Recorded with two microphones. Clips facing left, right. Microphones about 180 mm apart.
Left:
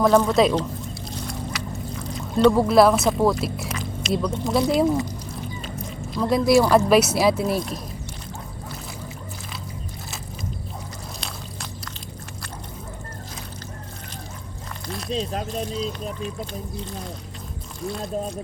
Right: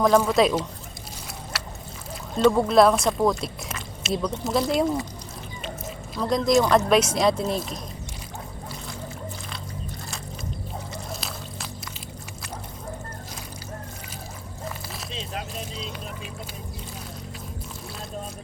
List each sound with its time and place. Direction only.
0.0 s speech: 5° right (ahead or behind)
2.1 s speech: centre (ahead or behind)
5.8 s a sound: centre (ahead or behind)
6.6 s speech: 5° left (ahead or behind)
15.1 s speech: 40° left (ahead or behind)
17.8 s speech: centre (ahead or behind)